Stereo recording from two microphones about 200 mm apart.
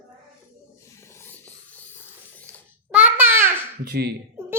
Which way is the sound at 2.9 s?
10° right (ahead or behind).